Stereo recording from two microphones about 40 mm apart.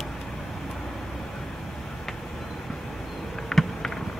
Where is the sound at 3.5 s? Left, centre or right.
Centre.